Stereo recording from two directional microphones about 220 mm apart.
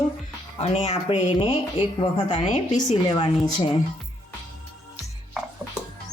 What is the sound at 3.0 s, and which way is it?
Speech, 20° left (ahead or behind).